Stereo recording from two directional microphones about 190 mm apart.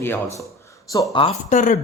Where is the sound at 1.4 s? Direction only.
40° left (ahead or behind).